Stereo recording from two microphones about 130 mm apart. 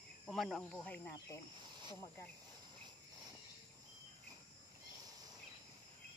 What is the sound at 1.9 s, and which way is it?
Speech, 25° left (ahead or behind).